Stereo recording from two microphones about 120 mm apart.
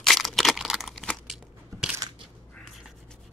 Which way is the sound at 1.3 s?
5° right (ahead or behind).